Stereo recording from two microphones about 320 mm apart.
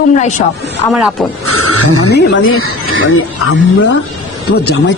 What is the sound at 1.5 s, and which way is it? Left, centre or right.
Speech, right.